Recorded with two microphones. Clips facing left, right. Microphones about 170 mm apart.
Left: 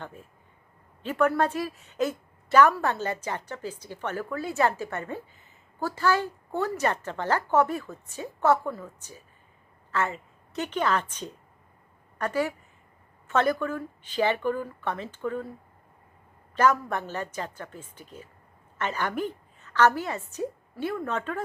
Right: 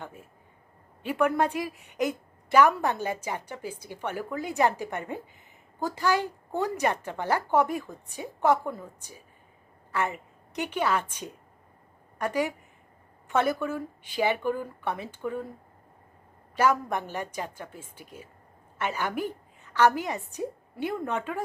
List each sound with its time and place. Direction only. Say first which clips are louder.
0.0 s a woman's voice: left 1 dB; 10° right (ahead or behind)
16.6 s a woman's voice: left 1 dB; 10° right (ahead or behind)